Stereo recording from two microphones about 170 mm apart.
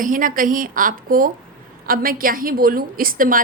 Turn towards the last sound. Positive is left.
turn(degrees=-55)  # may be behind; listen again after turning